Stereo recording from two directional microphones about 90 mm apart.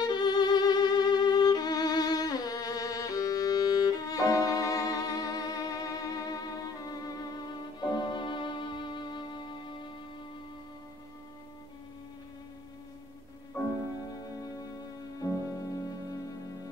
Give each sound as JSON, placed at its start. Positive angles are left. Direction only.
{"t": 0.0, "sound": "violin", "side_deg": 50}
{"t": 7.8, "sound": "music", "side_deg": 55}
{"t": 13.5, "sound": "music", "side_deg": 25}
{"t": 14.2, "sound": "music", "side_deg": 40}